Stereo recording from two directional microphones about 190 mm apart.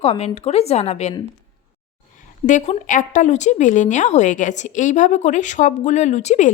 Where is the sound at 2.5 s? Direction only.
40° left (ahead or behind).